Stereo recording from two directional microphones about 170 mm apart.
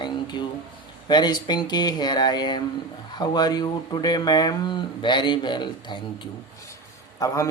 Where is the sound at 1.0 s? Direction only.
25° left (ahead or behind).